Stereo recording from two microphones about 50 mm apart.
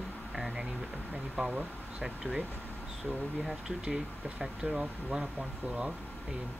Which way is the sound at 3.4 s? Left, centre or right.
Centre.